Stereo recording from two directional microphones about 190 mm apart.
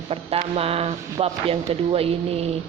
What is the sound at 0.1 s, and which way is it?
Speech, 30° right (ahead or behind).